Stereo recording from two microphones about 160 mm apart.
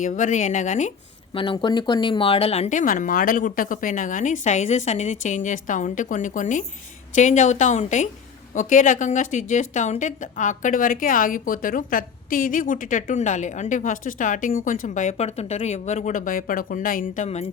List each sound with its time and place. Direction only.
0.0 s speech: 50° left (ahead or behind)
1.3 s speech: 30° left (ahead or behind); by 17.2 s 60° left (ahead or behind)